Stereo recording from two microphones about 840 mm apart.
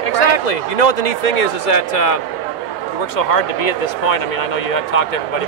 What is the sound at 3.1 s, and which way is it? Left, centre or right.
Speech, left.